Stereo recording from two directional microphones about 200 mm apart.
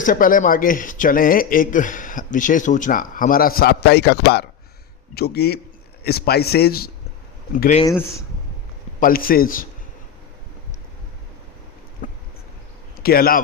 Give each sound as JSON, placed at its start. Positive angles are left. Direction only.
{"t": 0.0, "sound": "speech", "side_deg": 45}
{"t": 9.0, "sound": "speech", "side_deg": 45}
{"t": 12.0, "sound": "a sound", "side_deg": 40}
{"t": 13.0, "sound": "speech", "side_deg": 50}